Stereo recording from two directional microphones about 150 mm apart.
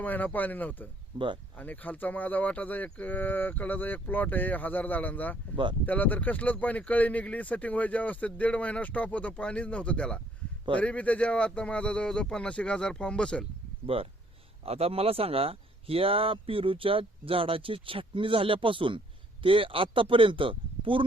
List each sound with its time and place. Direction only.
0.0 s speech: 10° left (ahead or behind)
1.1 s speech: 30° right (ahead or behind)
1.5 s speech: 10° left (ahead or behind)
13.8 s speech: 40° right (ahead or behind)